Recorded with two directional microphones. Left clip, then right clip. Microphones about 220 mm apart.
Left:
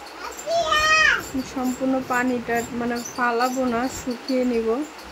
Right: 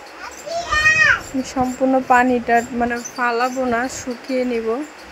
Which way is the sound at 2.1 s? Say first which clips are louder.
Right 9 dB; 25° right (ahead or behind).